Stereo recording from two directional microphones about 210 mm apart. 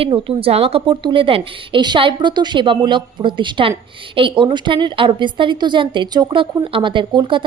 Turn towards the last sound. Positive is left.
turn(degrees=-25)  # may be behind; listen again after turning